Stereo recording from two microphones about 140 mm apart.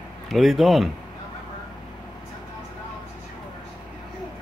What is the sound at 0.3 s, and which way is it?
Speech, centre (ahead or behind).